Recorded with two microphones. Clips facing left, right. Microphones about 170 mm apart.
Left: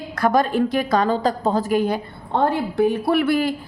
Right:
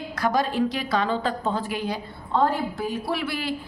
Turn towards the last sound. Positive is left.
turn(degrees=50)  # may be behind; listen again after turning